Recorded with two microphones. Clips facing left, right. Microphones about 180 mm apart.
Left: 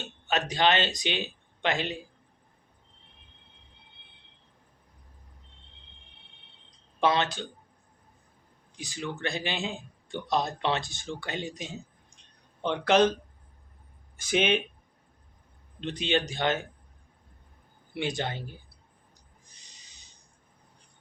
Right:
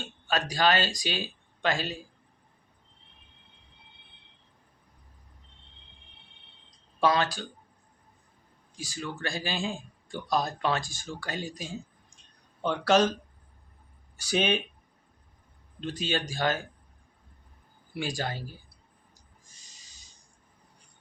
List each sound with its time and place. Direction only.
0.3 s a man's voice: 20° left (ahead or behind)
7.0 s a man's voice: 20° left (ahead or behind)
8.7 s a man's voice: 20° left (ahead or behind)
14.2 s a man's voice: 20° left (ahead or behind)
15.8 s a man's voice: 20° left (ahead or behind)
17.9 s a man's voice: 20° left (ahead or behind)
19.5 s owl: 20° left (ahead or behind)